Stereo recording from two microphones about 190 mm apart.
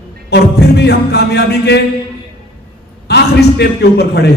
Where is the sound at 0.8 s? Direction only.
60° left (ahead or behind).